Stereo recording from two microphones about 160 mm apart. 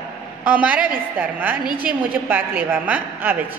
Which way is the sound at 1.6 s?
65° right (ahead or behind).